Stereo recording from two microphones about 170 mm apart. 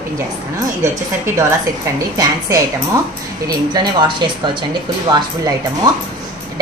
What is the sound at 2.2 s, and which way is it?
A woman's voice, 20° right (ahead or behind).